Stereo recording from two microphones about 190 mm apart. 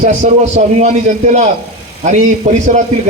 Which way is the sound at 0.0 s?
40° right (ahead or behind).